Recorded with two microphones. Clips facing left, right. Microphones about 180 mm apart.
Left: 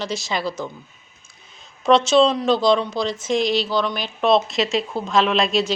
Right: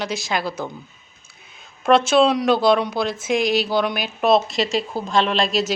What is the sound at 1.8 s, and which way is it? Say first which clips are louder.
A woman's voice: even; 55° right (ahead or behind).